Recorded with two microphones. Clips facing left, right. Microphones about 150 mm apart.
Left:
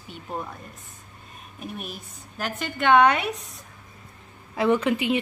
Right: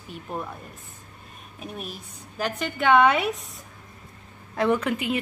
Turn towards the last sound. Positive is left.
turn(degrees=5)  # may be behind; listen again after turning